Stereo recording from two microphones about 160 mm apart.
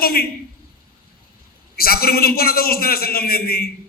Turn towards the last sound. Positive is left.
turn(degrees=70)  # may be behind; listen again after turning